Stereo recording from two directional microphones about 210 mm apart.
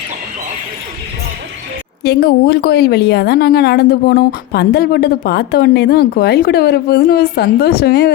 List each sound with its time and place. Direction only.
2.0 s a woman's voice: 50° left (ahead or behind)